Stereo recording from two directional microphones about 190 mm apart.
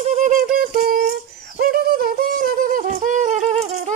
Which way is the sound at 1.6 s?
50° right (ahead or behind).